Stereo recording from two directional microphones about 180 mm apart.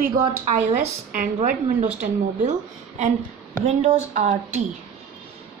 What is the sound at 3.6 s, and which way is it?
Speech, 35° right (ahead or behind).